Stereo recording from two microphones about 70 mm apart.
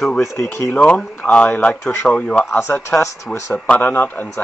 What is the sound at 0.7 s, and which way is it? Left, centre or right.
A man's voice, left.